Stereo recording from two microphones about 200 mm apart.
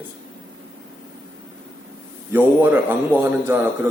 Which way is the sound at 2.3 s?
10° right (ahead or behind).